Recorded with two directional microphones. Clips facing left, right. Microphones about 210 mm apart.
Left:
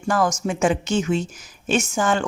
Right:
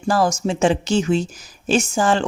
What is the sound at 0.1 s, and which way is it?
Speech, 30° right (ahead or behind).